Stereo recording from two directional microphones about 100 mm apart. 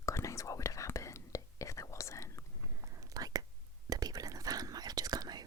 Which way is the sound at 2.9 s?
35° right (ahead or behind).